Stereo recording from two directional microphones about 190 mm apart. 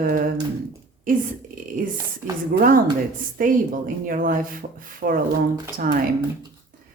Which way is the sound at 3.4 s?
45° right (ahead or behind).